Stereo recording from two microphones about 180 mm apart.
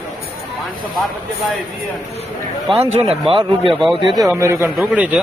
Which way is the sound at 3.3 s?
30° right (ahead or behind).